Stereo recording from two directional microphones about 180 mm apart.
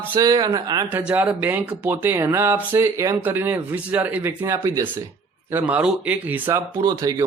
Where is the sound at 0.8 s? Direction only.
10° right (ahead or behind).